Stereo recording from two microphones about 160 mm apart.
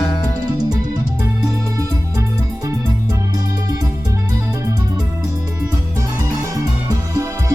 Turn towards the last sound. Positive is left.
turn(degrees=-20)  # may be behind; listen again after turning